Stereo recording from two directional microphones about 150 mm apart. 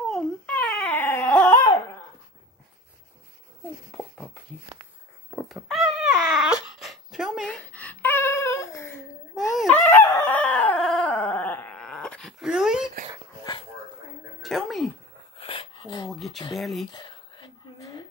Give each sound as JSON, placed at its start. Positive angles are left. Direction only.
{"t": 0.1, "sound": "dog", "side_deg": 5}
{"t": 3.9, "sound": "a sound", "side_deg": 10}
{"t": 9.3, "sound": "dog", "side_deg": 0}
{"t": 9.8, "sound": "dog", "side_deg": 15}
{"t": 13.4, "sound": "dog", "side_deg": 30}
{"t": 14.4, "sound": "a sound", "side_deg": 0}
{"t": 15.3, "sound": "dog", "side_deg": 35}
{"t": 16.1, "sound": "a sound", "side_deg": 0}
{"t": 16.5, "sound": "speech", "side_deg": 0}
{"t": 16.9, "sound": "whispering", "side_deg": 30}